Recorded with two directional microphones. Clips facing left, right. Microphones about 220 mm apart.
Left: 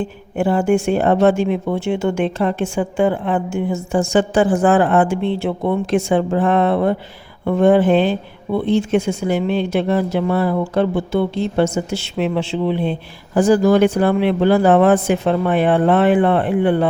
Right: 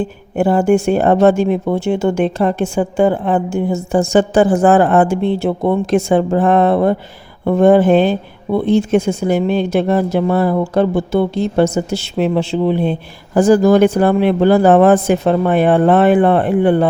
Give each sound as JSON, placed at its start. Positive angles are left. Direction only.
{"t": 0.3, "sound": "speech", "side_deg": -40}